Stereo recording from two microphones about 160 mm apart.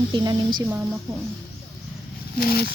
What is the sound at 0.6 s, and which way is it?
Speech, 15° right (ahead or behind).